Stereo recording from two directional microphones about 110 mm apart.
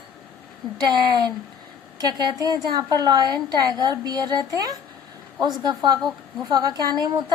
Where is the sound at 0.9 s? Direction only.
40° right (ahead or behind).